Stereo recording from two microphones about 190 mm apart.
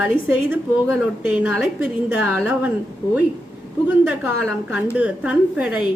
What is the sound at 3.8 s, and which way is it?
A woman's voice, 5° right (ahead or behind).